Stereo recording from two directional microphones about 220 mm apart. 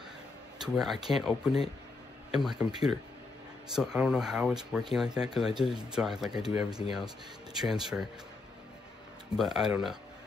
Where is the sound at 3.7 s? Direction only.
5° right (ahead or behind).